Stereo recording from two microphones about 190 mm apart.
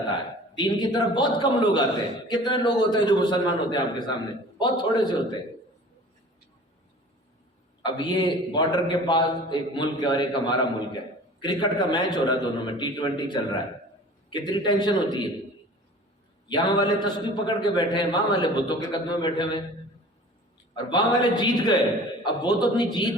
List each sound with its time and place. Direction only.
0.5 s a man's voice: 20° left (ahead or behind)
7.9 s a man's voice: 25° left (ahead or behind)
16.5 s a man's voice: 25° left (ahead or behind)
20.7 s a man's voice: 25° left (ahead or behind)